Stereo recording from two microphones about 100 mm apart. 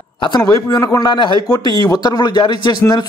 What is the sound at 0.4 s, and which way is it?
A man's voice, 30° left (ahead or behind).